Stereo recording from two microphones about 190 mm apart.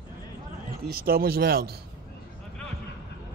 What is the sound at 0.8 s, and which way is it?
Speech, 55° right (ahead or behind).